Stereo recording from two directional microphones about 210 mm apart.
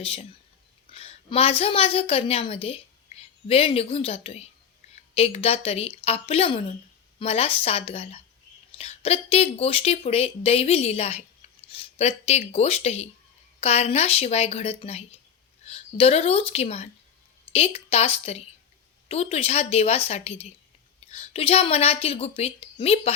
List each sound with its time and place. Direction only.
0.0 s a woman's voice: 25° left (ahead or behind)